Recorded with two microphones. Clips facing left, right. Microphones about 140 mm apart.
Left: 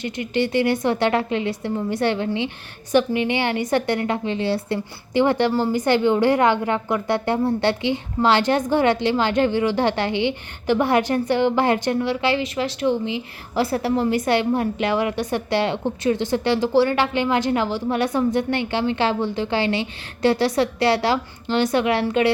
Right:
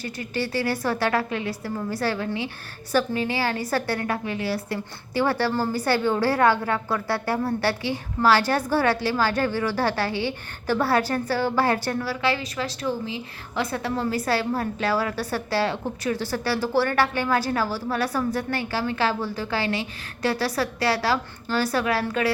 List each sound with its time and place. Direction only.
0.0 s a woman's voice: 20° left (ahead or behind)